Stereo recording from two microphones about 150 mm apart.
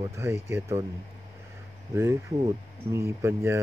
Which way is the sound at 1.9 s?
20° right (ahead or behind).